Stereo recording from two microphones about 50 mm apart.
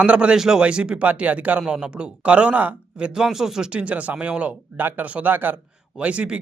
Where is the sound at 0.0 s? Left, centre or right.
Right.